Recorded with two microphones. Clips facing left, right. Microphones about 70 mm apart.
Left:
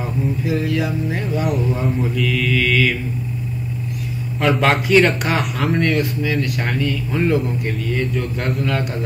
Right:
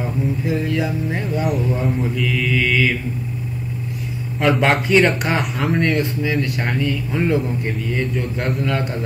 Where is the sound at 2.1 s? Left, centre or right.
Centre.